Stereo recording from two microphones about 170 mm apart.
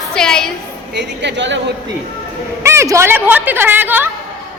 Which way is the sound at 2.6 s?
15° right (ahead or behind).